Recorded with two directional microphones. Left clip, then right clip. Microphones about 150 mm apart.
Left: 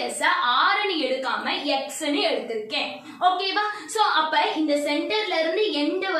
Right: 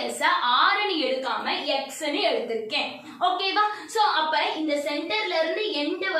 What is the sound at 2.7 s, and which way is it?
Speech, 20° right (ahead or behind).